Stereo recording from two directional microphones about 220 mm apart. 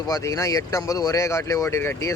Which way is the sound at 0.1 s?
15° left (ahead or behind).